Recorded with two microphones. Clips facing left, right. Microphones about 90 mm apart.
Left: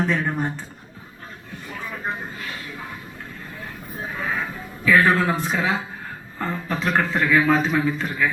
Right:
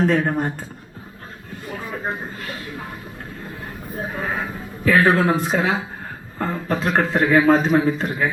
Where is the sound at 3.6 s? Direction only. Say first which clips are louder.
Right 3 dB; 40° right (ahead or behind).